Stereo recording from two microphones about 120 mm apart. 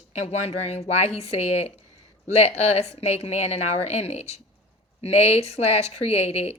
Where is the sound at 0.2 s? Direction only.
65° left (ahead or behind).